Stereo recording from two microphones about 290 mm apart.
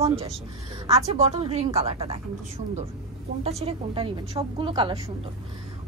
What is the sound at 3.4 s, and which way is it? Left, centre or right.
A woman's voice, right.